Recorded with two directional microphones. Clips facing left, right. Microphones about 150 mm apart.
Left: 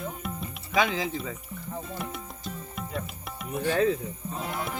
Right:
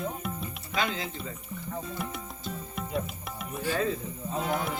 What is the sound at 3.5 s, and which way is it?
Speech, 60° left (ahead or behind).